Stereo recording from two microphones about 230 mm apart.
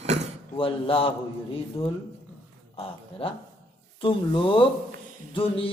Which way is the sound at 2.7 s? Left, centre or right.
Left.